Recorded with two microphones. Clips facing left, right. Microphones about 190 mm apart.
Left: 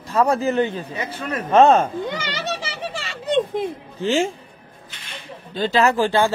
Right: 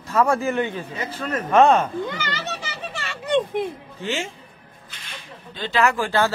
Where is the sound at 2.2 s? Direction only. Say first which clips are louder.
Left 3 dB; 80° left.